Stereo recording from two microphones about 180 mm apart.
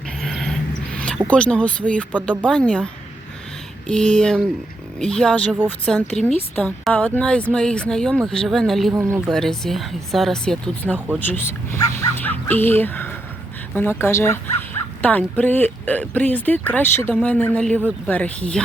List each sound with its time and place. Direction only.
0.2 s vehicle: centre (ahead or behind)
1.3 s a woman's voice: 5° left (ahead or behind)
8.9 s speech: 15° right (ahead or behind)
9.2 s a woman's voice: centre (ahead or behind)
17.7 s speech: 10° right (ahead or behind)
18.1 s speech: 5° left (ahead or behind)